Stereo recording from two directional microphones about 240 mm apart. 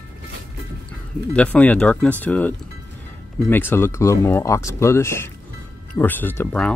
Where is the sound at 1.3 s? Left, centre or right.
Centre.